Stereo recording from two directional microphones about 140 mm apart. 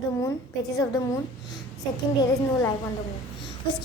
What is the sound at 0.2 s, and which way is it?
A woman's voice, 25° left (ahead or behind).